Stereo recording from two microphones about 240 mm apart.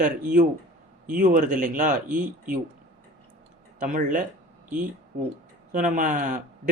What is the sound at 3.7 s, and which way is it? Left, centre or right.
Speech, right.